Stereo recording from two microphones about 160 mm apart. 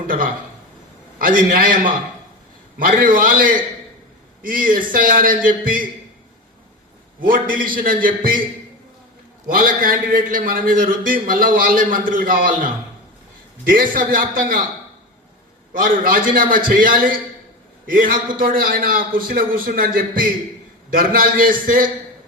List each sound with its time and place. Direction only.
1.2 s a man's voice: 60° right (ahead or behind)
7.2 s a man's voice: 60° right (ahead or behind)
9.5 s a man's voice: 60° right (ahead or behind)
15.7 s a man's voice: 60° right (ahead or behind)